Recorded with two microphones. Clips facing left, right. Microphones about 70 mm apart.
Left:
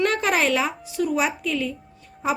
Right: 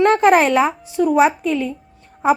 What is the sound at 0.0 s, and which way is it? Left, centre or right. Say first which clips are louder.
Speech: right 9 dB; right.